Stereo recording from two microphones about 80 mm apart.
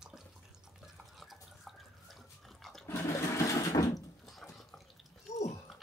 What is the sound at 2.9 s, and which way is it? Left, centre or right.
Toilet flush, left.